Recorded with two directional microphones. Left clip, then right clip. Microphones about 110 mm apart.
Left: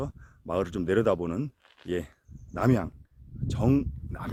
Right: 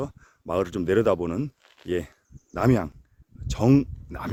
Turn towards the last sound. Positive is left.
turn(degrees=-70)  # may be behind; listen again after turning